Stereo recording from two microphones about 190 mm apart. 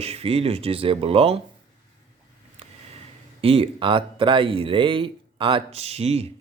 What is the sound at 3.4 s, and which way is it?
Speech, 30° right (ahead or behind).